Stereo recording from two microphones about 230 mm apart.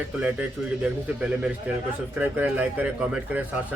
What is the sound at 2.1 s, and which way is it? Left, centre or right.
Speech, centre.